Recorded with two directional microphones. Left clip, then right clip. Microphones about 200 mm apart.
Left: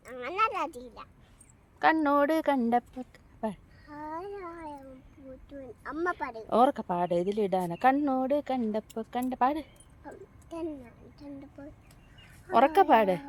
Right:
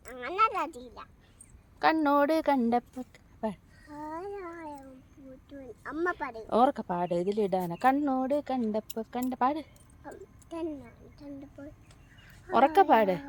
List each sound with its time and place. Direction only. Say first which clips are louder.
0.0 s a sound: right 2 dB; 5° left (ahead or behind)
1.8 s speech: even; 10° left (ahead or behind)
3.8 s a sound: even; centre (ahead or behind)
5.5 s speech: even; centre (ahead or behind)
6.5 s speech: left 1 dB; 15° left (ahead or behind)
10.0 s a woman's voice: right 1 dB; centre (ahead or behind)
12.5 s speech: even; 15° left (ahead or behind)